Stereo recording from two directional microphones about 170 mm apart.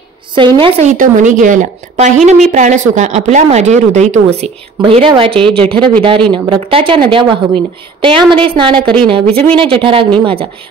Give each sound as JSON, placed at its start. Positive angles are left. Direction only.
{"t": 0.3, "sound": "a woman's voice", "side_deg": -30}
{"t": 0.7, "sound": "a woman's voice", "side_deg": -50}